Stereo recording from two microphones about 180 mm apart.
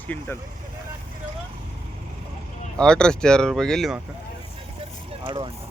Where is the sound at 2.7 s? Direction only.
5° left (ahead or behind).